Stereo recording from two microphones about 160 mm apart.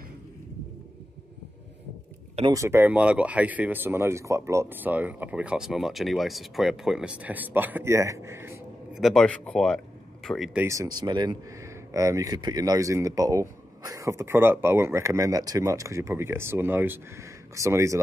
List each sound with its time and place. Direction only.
2.5 s speech: 15° right (ahead or behind)
8.9 s speech: centre (ahead or behind)
10.6 s speech: 20° right (ahead or behind)